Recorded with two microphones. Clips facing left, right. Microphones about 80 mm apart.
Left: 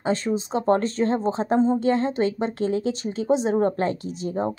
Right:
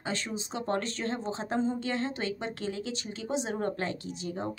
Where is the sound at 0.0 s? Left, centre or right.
Left.